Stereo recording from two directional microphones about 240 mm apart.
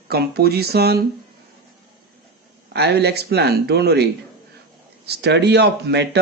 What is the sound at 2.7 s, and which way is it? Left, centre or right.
Speech, right.